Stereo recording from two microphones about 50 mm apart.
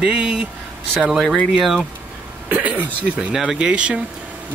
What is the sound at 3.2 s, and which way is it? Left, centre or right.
Speech, centre.